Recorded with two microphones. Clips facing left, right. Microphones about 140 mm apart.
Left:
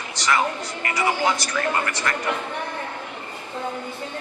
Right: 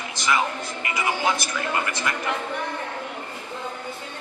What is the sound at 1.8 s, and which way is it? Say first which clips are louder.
Speech: left 1 dB; 20° right (ahead or behind).